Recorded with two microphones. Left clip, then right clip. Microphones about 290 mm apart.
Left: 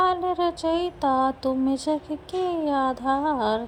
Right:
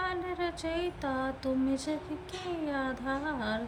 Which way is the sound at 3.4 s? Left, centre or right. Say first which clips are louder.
Left 10 dB; centre.